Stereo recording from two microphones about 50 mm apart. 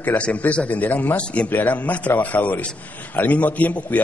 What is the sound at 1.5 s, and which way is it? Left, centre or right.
A man's voice, left.